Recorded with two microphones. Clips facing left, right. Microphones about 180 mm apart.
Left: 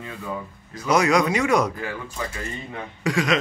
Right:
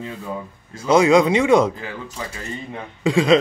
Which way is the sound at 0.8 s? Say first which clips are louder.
Right 5 dB; 25° right (ahead or behind).